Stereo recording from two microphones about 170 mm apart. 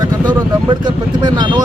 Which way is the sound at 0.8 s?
25° right (ahead or behind).